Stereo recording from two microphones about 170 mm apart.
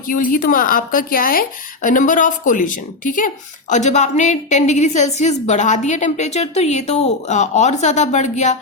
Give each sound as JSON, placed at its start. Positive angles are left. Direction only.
{"t": 0.1, "sound": "a woman's voice", "side_deg": 55}